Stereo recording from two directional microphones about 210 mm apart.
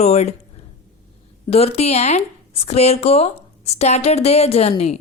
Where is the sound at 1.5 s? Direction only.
30° left (ahead or behind).